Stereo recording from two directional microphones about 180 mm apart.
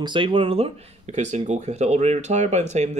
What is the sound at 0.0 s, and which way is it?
Speech, 25° right (ahead or behind).